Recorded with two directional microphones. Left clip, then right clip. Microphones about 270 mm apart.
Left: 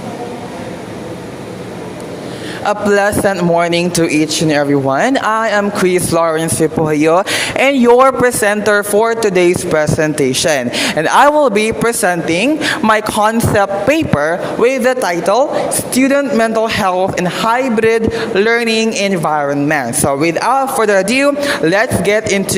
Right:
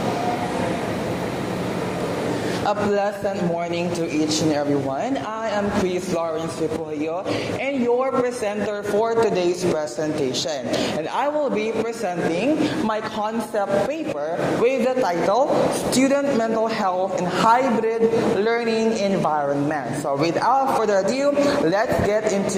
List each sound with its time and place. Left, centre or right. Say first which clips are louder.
2.6 s a man's voice: left 10 dB; left